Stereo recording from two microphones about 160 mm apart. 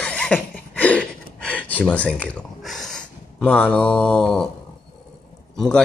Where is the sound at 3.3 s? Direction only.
10° left (ahead or behind).